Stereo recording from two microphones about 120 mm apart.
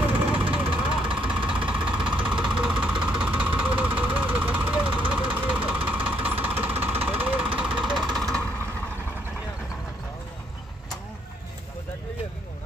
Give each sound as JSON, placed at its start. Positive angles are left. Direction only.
{"t": 0.5, "sound": "vehicle", "side_deg": -45}
{"t": 1.1, "sound": "vehicle", "side_deg": -10}